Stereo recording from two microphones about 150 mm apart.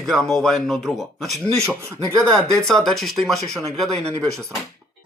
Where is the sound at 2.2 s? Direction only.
5° left (ahead or behind).